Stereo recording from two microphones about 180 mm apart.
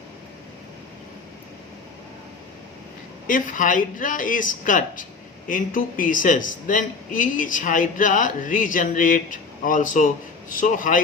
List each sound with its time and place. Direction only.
3.2 s a man's voice: 50° left (ahead or behind)